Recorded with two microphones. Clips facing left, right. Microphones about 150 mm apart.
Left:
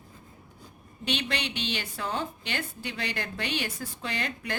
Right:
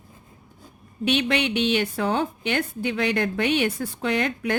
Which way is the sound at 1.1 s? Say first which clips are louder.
Right 9 dB; 60° right (ahead or behind).